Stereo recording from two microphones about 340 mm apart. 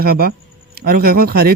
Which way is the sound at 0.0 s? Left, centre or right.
Right.